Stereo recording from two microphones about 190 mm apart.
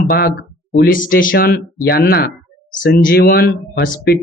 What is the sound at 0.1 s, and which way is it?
Speech, 55° left (ahead or behind).